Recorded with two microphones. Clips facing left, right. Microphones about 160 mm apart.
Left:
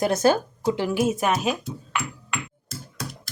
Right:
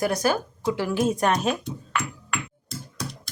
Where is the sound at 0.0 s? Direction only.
25° left (ahead or behind).